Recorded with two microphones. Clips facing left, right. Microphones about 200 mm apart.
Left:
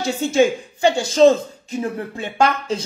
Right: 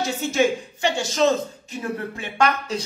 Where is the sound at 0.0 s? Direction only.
30° left (ahead or behind).